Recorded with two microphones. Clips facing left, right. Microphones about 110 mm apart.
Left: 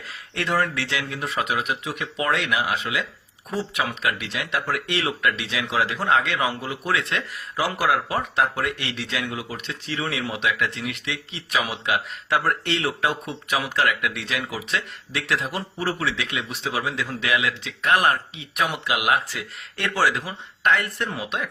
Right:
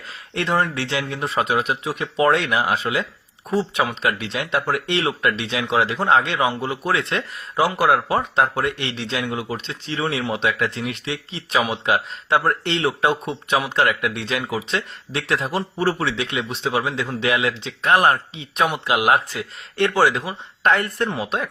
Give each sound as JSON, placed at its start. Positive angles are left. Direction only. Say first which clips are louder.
{"t": 0.1, "sound": "speech", "louder": "right 3 dB", "side_deg": -25}